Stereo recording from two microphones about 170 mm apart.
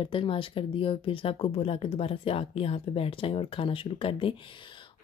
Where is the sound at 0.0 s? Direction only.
30° left (ahead or behind).